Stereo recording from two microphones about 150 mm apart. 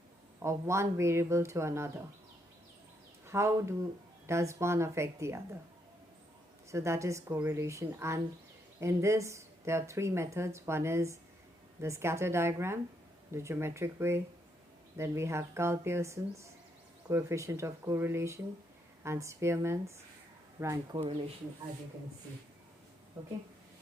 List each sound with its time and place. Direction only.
0.4 s speech: 20° right (ahead or behind)
3.2 s speech: 20° right (ahead or behind)
6.7 s speech: 20° right (ahead or behind)
20.9 s speech: 35° right (ahead or behind)